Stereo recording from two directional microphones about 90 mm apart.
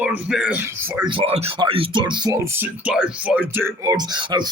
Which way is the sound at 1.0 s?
75° right (ahead or behind).